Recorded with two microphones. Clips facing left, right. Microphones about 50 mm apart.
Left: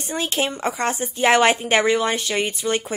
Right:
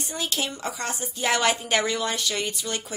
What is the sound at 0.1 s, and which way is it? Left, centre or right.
Speech, left.